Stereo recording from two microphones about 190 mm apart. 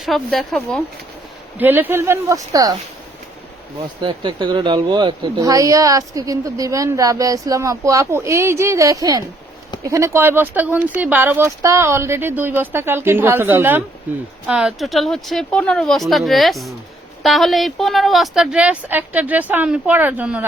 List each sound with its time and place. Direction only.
0.0 s speech: centre (ahead or behind)
1.5 s speech: 10° right (ahead or behind)
4.0 s speech: 25° right (ahead or behind); by 20.4 s 10° right (ahead or behind)